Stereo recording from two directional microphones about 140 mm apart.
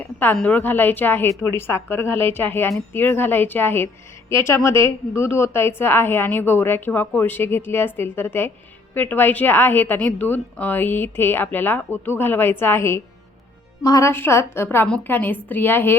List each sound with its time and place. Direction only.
0.3 s a woman's voice: 10° left (ahead or behind)